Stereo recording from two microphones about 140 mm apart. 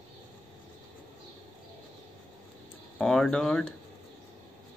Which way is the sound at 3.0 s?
Centre (ahead or behind).